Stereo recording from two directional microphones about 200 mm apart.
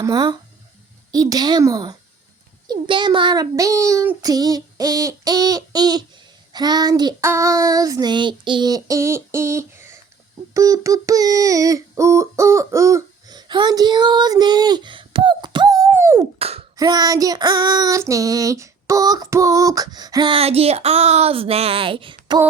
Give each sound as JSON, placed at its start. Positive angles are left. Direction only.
{"t": 0.0, "sound": "child singing", "side_deg": -20}
{"t": 10.5, "sound": "a sound", "side_deg": -15}
{"t": 16.4, "sound": "speech", "side_deg": -30}
{"t": 16.7, "sound": "child singing", "side_deg": -20}